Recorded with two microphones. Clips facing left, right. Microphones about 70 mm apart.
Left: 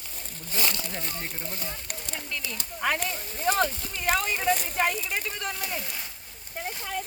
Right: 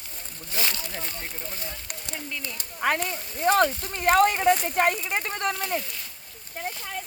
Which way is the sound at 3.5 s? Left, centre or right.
Right.